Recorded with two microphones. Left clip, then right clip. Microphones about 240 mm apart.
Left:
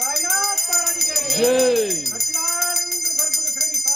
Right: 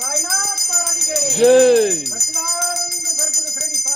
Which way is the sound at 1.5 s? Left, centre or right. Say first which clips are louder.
Right 7 dB; centre.